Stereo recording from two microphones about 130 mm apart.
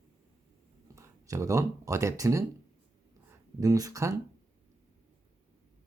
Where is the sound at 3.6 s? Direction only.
25° right (ahead or behind).